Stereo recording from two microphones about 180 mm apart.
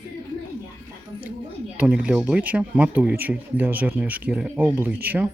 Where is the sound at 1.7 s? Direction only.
5° right (ahead or behind).